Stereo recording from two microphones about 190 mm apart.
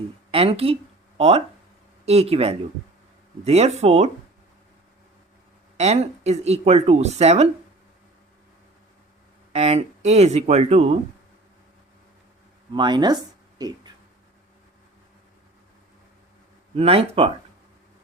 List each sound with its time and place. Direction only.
0.3 s speech: 30° right (ahead or behind)
2.0 s speech: 35° right (ahead or behind)
5.7 s speech: 35° right (ahead or behind)
9.5 s speech: 35° right (ahead or behind)
12.7 s speech: 25° right (ahead or behind)
16.7 s speech: 30° right (ahead or behind)